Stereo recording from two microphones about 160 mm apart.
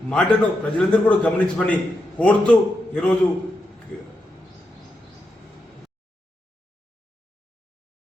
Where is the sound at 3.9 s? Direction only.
5° left (ahead or behind).